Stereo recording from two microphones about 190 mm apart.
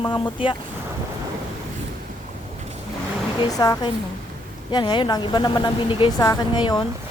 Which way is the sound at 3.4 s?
20° left (ahead or behind).